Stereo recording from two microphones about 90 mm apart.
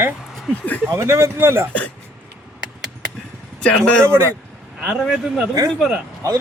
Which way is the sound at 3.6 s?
10° left (ahead or behind).